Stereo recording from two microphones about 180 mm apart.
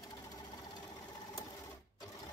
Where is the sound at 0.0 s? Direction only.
20° left (ahead or behind).